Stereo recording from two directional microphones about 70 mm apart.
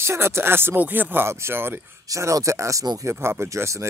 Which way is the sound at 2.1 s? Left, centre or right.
Right.